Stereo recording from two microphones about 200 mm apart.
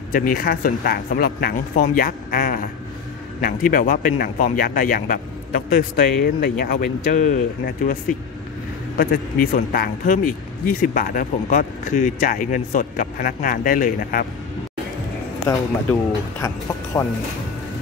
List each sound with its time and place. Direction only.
0.1 s speech: 45° left (ahead or behind)
15.9 s speech: 15° left (ahead or behind)